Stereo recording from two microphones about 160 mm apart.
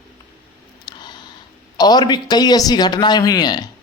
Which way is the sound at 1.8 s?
25° left (ahead or behind).